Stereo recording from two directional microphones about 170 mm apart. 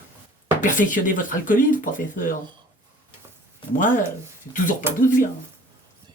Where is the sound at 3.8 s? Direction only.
50° left (ahead or behind).